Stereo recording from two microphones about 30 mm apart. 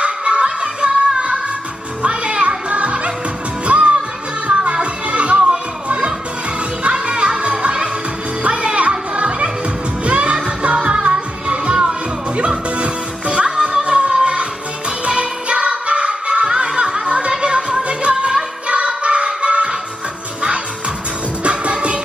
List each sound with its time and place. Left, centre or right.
0.0 s music: right
18.7 s music: right
21.5 s music: right